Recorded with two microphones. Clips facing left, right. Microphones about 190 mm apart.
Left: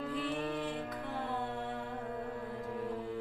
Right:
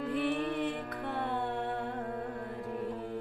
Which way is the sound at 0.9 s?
60° right (ahead or behind).